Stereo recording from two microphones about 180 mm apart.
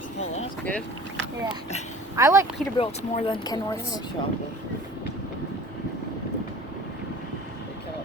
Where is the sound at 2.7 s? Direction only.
30° left (ahead or behind).